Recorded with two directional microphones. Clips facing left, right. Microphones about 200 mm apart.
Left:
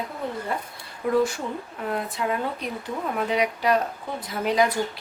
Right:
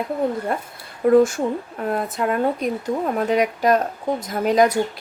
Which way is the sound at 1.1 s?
50° right (ahead or behind).